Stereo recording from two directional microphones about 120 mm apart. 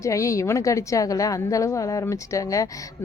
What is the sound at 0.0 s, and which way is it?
A woman's voice, 25° left (ahead or behind).